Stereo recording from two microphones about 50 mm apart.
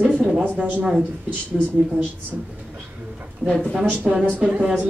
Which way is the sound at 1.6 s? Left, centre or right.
Left.